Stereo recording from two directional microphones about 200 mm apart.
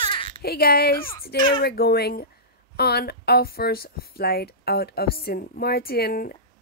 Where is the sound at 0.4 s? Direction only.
50° left (ahead or behind).